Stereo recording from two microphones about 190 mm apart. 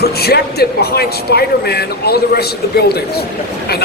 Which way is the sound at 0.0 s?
55° left (ahead or behind).